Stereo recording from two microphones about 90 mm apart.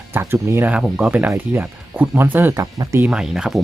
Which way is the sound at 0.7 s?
10° right (ahead or behind).